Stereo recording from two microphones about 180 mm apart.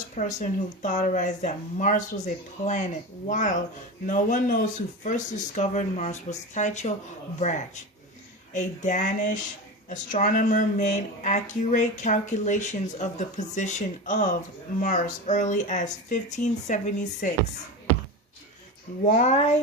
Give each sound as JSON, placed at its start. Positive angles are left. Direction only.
{"t": 0.2, "sound": "speech", "side_deg": 45}
{"t": 8.5, "sound": "speech", "side_deg": 40}
{"t": 19.0, "sound": "speech", "side_deg": 40}